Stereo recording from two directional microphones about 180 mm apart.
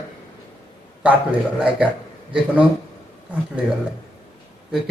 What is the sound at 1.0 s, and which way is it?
Speech, 5° right (ahead or behind).